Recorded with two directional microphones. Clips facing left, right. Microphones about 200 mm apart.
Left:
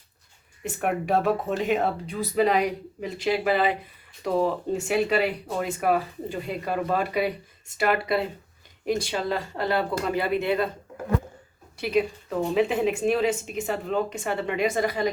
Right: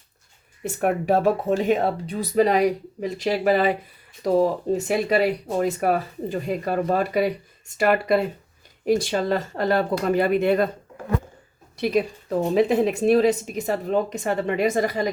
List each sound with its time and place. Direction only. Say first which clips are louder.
0.8 s a woman's voice: right 4 dB; 40° right (ahead or behind)
9.0 s speech: right 5 dB; 45° right (ahead or behind)
11.8 s a woman's voice: right 2 dB; 40° right (ahead or behind)